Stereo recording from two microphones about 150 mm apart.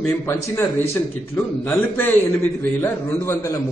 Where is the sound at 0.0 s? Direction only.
15° left (ahead or behind).